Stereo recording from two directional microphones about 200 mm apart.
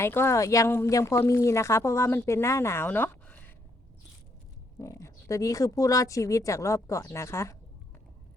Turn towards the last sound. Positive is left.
turn(degrees=15)  # may be behind; listen again after turning